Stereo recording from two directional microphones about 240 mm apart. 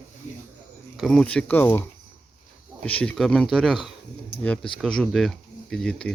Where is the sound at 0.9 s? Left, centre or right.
Centre.